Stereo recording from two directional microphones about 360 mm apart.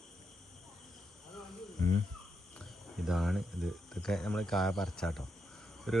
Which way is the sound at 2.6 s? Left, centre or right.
Centre.